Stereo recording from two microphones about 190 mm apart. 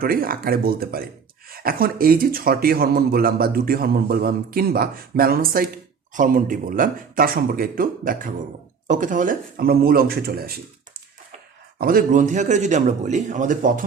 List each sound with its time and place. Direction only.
0.0 s speech: 50° right (ahead or behind)
11.8 s a man's voice: 50° right (ahead or behind)